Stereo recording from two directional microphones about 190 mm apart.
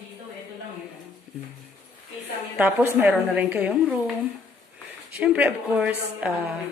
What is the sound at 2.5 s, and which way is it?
A woman's voice, 10° right (ahead or behind).